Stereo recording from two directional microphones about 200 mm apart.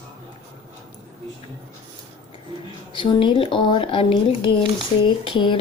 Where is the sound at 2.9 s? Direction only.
25° left (ahead or behind).